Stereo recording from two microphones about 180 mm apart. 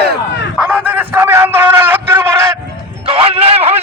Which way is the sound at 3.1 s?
30° right (ahead or behind).